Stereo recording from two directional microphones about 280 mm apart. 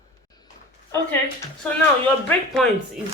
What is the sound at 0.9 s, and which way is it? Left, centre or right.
Speech, centre.